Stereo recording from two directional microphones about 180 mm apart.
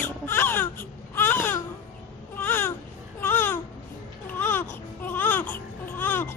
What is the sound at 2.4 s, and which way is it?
Babbling, 10° left (ahead or behind).